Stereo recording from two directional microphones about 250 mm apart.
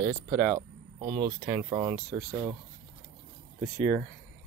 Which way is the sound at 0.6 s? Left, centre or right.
Centre.